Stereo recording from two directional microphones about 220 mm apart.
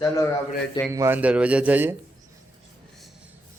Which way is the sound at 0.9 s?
10° right (ahead or behind).